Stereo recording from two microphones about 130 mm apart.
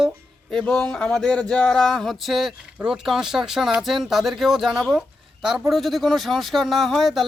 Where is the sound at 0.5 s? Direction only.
5° left (ahead or behind).